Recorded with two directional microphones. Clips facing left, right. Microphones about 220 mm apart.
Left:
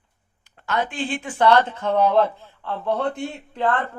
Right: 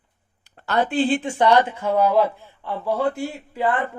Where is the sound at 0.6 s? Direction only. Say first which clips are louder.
Right 5 dB; 35° right (ahead or behind).